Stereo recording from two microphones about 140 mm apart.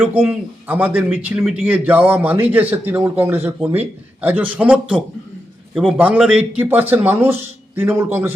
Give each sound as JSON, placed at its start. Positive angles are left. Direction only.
{"t": 0.0, "sound": "a man's voice", "side_deg": -10}